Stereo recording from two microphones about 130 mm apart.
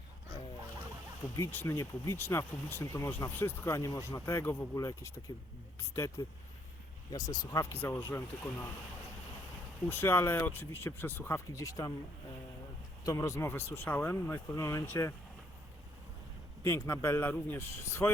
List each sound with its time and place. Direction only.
1.4 s speech: 20° left (ahead or behind)
7.1 s speech: 30° left (ahead or behind)
9.9 s speech: 15° left (ahead or behind)
13.1 s speech: 25° left (ahead or behind)
16.6 s speech: 20° left (ahead or behind)